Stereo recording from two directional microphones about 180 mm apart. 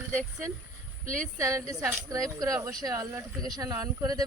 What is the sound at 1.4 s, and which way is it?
Speech, 15° right (ahead or behind).